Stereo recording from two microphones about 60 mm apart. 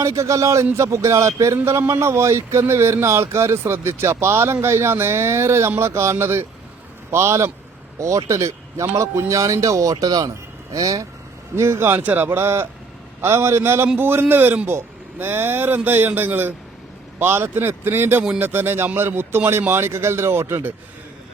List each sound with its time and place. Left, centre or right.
0.0 s speech: right
7.9 s speech: right
11.5 s speech: right
12.0 s speech: right
12.4 s a man's voice: right